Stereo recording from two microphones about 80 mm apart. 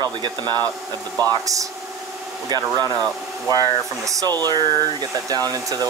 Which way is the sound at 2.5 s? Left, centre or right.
Right.